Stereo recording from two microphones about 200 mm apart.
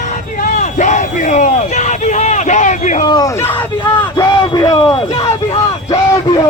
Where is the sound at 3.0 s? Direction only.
20° left (ahead or behind).